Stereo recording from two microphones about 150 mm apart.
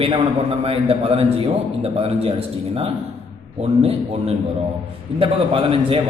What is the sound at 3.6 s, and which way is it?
A man's voice, 45° right (ahead or behind).